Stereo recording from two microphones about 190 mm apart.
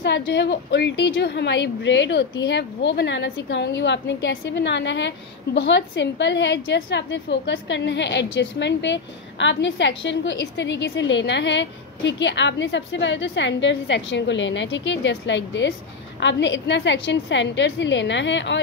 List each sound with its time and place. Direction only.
0.0 s a woman's voice: 65° left (ahead or behind)